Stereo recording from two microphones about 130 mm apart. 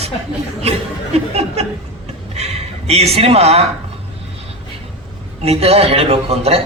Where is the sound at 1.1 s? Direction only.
55° right (ahead or behind).